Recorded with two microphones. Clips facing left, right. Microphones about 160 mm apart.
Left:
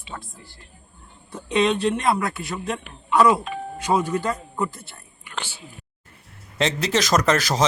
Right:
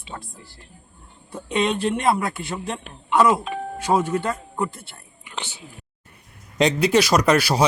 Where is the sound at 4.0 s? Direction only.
25° right (ahead or behind).